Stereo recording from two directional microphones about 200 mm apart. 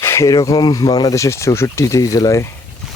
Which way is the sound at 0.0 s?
15° left (ahead or behind).